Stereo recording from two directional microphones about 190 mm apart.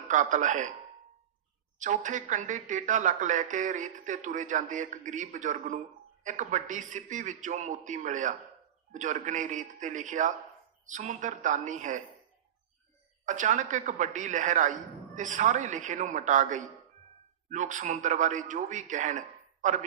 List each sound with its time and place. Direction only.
0.1 s speech: 40° right (ahead or behind)
1.8 s speech: 40° right (ahead or behind)
13.2 s speech: 40° right (ahead or behind)